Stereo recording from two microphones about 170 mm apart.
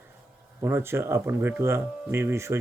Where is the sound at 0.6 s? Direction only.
15° right (ahead or behind).